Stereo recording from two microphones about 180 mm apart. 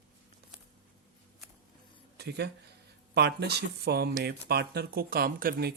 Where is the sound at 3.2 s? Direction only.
65° right (ahead or behind).